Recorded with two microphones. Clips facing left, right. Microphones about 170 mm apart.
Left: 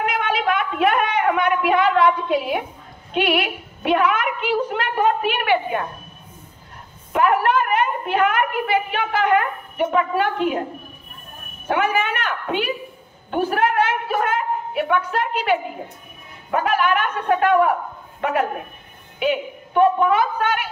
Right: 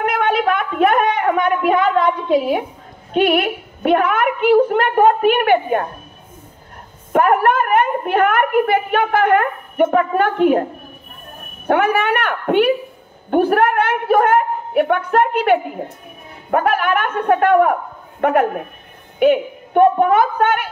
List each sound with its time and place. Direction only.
0.0 s a sound: 55° right (ahead or behind); by 2.6 s 40° right (ahead or behind)
3.1 s a woman's voice: 45° right (ahead or behind)
7.1 s a woman's voice: 50° right (ahead or behind)
11.6 s a woman's voice: 60° right (ahead or behind)